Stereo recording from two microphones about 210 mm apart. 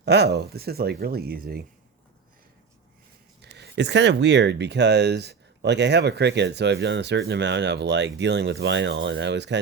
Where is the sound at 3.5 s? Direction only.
55° right (ahead or behind).